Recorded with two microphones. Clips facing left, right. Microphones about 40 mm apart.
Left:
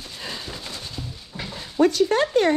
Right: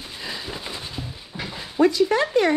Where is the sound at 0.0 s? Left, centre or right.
Centre.